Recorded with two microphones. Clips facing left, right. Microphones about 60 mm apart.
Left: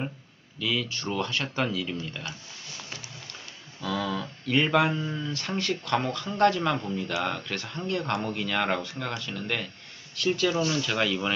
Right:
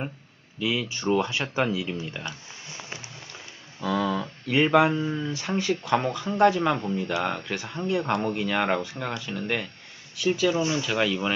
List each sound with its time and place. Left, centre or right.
0.6 s speech: centre
3.9 s speech: centre
6.8 s speech: right
7.2 s speech: centre
10.6 s speech: right
10.9 s speech: centre